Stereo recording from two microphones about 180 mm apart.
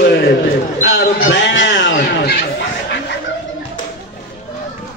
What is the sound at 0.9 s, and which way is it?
A man's voice, 85° left.